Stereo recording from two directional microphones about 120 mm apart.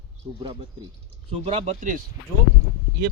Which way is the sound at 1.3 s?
60° right (ahead or behind).